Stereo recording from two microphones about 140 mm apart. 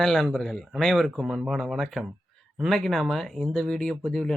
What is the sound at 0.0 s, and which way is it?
Speech, centre (ahead or behind).